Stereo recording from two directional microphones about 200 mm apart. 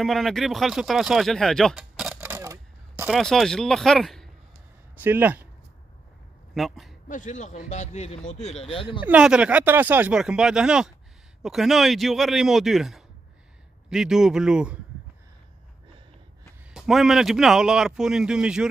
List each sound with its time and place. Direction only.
0.0 s speech: centre (ahead or behind)
3.1 s speech: centre (ahead or behind)
4.9 s speech: 10° right (ahead or behind)
6.5 s a man's voice: centre (ahead or behind)
7.1 s speech: 40° left (ahead or behind)
9.0 s speech: 5° right (ahead or behind)
16.7 s speech: centre (ahead or behind)